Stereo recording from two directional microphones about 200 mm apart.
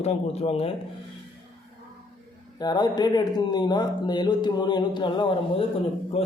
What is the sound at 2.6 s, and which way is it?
A man's voice, 20° left (ahead or behind).